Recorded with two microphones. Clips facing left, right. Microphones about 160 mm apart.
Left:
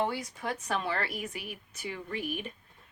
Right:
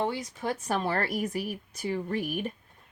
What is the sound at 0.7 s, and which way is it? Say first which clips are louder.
A woman's voice: right 4 dB; 40° right (ahead or behind).